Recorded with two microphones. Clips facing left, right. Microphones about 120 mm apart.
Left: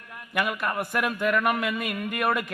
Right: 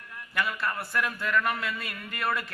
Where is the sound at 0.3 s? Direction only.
15° left (ahead or behind).